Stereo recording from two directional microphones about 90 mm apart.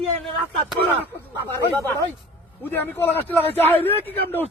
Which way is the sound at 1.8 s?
30° left (ahead or behind).